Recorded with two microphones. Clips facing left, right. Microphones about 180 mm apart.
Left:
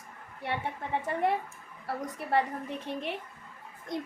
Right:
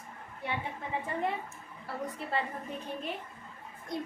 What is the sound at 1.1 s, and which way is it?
A woman's voice, 70° left (ahead or behind).